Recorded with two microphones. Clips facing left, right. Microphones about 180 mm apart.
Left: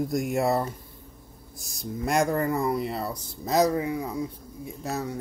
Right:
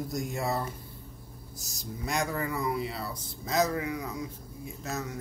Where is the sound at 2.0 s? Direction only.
55° left (ahead or behind).